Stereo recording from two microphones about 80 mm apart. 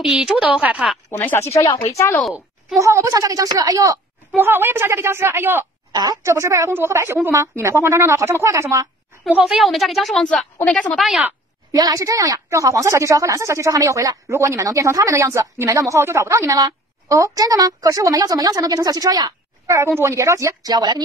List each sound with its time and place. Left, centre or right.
0.0 s a woman's voice: centre
1.1 s speech: left
1.6 s speech: left
2.8 s a woman's voice: right
4.4 s a woman's voice: right
5.9 s a sound: right
6.2 s a woman's voice: right
9.4 s a woman's voice: centre
10.3 s a woman's voice: centre
11.7 s a woman's voice: right
20.6 s speech: right